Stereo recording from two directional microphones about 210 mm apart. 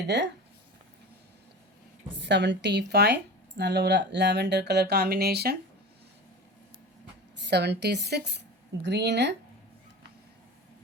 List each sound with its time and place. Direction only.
0.1 s speech: 55° right (ahead or behind)
2.2 s speech: 55° right (ahead or behind)
7.4 s speech: 55° right (ahead or behind)